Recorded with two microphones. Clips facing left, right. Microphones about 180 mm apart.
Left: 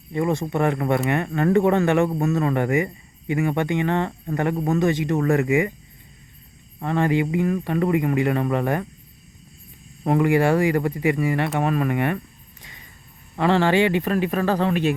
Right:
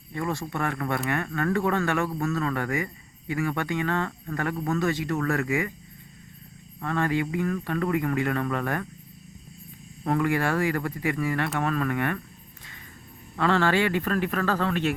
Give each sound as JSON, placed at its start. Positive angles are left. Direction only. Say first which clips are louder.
{"t": 0.1, "sound": "speech", "louder": "left 7 dB", "side_deg": 20}
{"t": 6.7, "sound": "speech", "louder": "left 5 dB", "side_deg": 20}
{"t": 10.1, "sound": "speech", "louder": "left 6 dB", "side_deg": 15}
{"t": 13.3, "sound": "speech", "louder": "left 4 dB", "side_deg": 15}